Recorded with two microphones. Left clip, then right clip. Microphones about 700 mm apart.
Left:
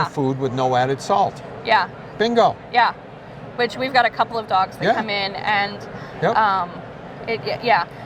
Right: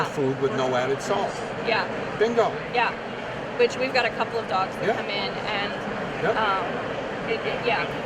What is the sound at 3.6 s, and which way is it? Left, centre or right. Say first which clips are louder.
A woman's voice: left 4 dB; left.